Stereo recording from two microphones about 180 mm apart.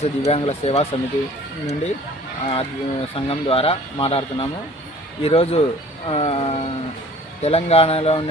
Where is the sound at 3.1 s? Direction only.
30° left (ahead or behind).